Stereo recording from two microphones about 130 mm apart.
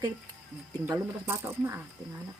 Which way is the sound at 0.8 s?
20° right (ahead or behind).